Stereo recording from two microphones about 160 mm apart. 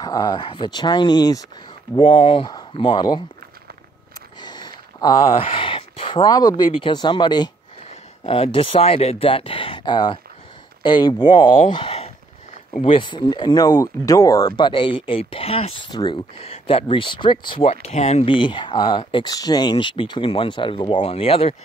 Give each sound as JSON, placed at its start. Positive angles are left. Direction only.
{"t": 0.0, "sound": "speech", "side_deg": 25}
{"t": 4.4, "sound": "speech", "side_deg": 25}
{"t": 11.7, "sound": "a sound", "side_deg": 35}
{"t": 12.8, "sound": "speech", "side_deg": 30}